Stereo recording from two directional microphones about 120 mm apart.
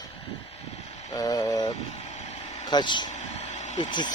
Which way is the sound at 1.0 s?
30° left (ahead or behind).